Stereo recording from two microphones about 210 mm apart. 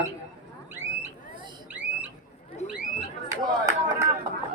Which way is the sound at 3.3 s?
10° right (ahead or behind).